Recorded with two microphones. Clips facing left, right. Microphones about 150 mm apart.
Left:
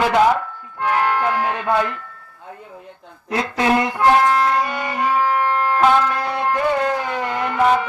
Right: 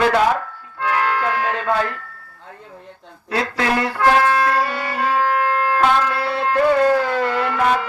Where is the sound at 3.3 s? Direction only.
15° left (ahead or behind).